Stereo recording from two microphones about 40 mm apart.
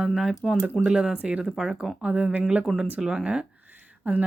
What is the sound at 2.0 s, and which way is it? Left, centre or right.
Speech, right.